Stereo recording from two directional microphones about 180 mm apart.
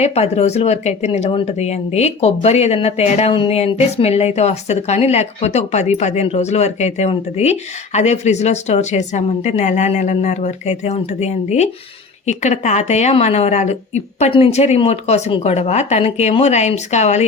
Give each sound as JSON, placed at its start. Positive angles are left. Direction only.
{"t": 0.0, "sound": "speech", "side_deg": 35}